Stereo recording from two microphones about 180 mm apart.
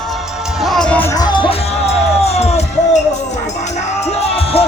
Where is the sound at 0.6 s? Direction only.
Centre (ahead or behind).